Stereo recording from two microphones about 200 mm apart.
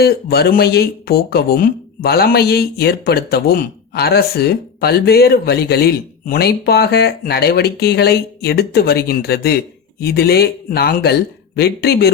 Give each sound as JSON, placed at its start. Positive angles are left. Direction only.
{"t": 0.0, "sound": "speech", "side_deg": 50}